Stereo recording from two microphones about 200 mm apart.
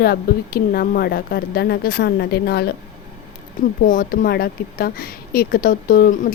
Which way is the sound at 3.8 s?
45° left (ahead or behind).